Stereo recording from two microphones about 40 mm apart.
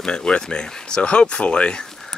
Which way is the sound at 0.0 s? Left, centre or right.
Left.